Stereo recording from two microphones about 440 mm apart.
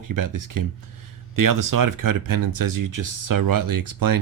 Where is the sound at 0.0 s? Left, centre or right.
Right.